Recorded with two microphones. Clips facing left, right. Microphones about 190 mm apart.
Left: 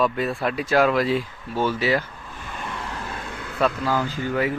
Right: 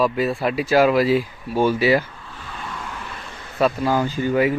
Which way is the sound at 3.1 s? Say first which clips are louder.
Left 4 dB; 55° left (ahead or behind).